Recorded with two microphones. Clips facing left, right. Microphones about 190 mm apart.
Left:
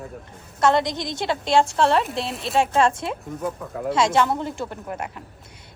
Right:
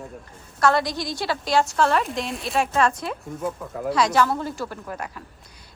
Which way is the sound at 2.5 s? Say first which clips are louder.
Left 2 dB; 25° left (ahead or behind).